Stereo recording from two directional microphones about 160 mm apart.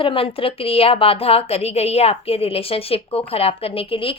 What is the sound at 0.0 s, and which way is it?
A woman's voice, 35° left (ahead or behind).